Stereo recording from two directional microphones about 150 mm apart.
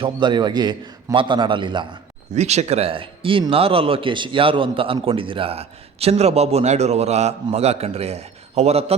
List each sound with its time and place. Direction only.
0.0 s speech: 30° right (ahead or behind)
2.3 s a man's voice: 45° right (ahead or behind)